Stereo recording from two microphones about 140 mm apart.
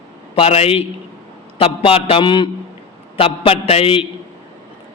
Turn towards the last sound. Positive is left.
turn(degrees=40)  # may be behind; listen again after turning